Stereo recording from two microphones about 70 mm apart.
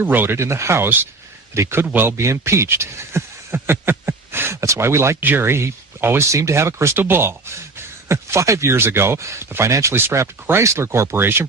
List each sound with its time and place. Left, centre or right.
0.0 s speech: right
0.3 s a man's voice: right
1.8 s a man's voice: right
6.9 s speech: right